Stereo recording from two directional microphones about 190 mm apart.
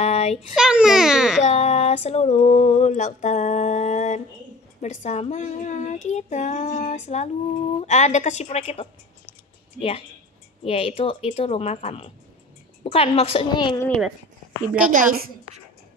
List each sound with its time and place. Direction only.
0.0 s a child's voice: 35° left (ahead or behind)
0.6 s a child's voice: 5° right (ahead or behind)
1.4 s speech: 35° left (ahead or behind)
13.7 s a child's voice: 5° left (ahead or behind)
14.9 s a woman's voice: 50° right (ahead or behind)